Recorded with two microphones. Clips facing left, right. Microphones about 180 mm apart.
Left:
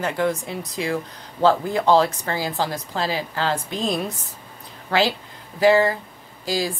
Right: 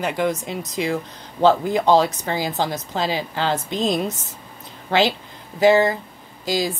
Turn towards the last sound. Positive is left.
turn(degrees=-20)  # may be behind; listen again after turning